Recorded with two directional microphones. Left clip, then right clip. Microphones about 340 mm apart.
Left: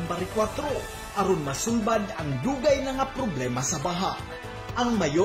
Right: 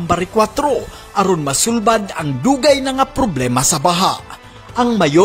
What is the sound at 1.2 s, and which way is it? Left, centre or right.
A man's voice, right.